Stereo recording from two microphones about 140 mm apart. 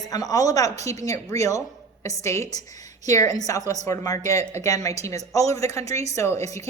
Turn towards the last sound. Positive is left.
turn(degrees=25)  # may be behind; listen again after turning